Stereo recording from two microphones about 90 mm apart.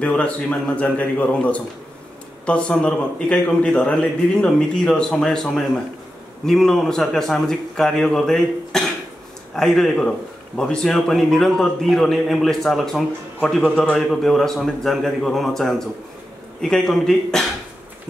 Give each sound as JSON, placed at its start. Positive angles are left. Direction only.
{"t": 0.0, "sound": "a man's voice", "side_deg": 15}